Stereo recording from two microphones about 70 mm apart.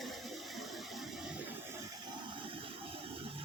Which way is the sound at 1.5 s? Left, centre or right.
Right.